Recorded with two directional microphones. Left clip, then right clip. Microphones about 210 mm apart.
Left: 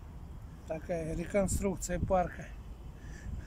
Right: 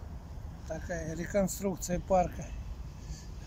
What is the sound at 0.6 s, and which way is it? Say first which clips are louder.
Speech: left 2 dB; 5° left (ahead or behind).